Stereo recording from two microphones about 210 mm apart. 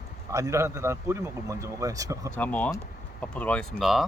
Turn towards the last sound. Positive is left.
turn(degrees=0)  # may be behind; listen again after turning